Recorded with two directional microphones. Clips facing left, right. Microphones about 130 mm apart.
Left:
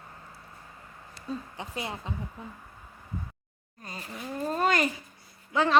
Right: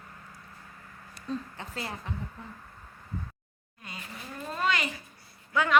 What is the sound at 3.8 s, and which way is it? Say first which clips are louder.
Speech: left 4 dB; 40° left (ahead or behind).